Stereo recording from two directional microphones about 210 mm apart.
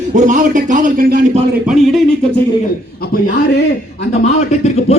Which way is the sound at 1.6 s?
Centre (ahead or behind).